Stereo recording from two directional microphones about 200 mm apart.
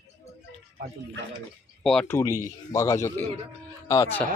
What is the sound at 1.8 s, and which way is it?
A man's voice, 5° left (ahead or behind).